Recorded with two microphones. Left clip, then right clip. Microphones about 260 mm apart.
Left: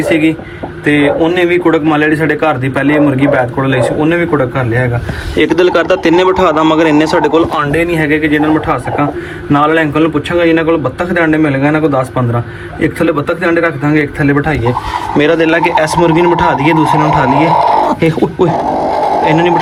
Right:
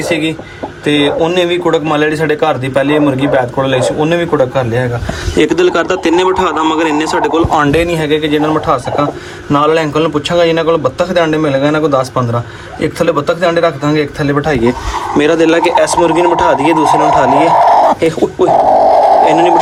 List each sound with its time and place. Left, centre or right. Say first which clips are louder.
0.9 s a man's voice: left 1 dB; right
7.5 s a man's voice: right 2 dB; right
13.0 s a man's voice: right 3 dB; centre